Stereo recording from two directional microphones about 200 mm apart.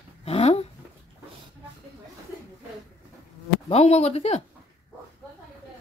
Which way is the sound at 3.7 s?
30° left (ahead or behind).